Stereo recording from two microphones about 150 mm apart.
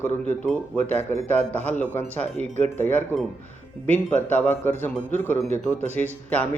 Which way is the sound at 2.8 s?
10° left (ahead or behind).